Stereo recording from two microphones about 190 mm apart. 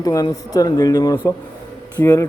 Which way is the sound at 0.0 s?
20° left (ahead or behind).